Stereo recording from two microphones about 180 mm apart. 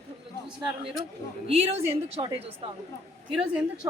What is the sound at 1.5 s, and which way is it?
A man's voice, 35° right (ahead or behind).